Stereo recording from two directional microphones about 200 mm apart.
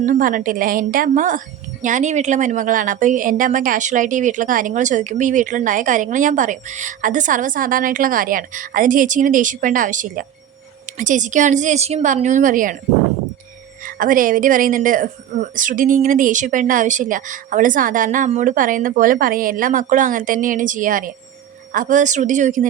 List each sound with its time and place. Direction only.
0.0 s a woman's voice: 40° right (ahead or behind)
13.8 s a woman's voice: 45° right (ahead or behind)